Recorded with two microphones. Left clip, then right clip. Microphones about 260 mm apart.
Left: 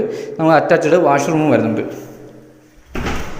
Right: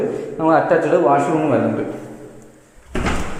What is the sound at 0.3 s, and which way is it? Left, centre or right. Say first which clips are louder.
Speech: left 3 dB; left.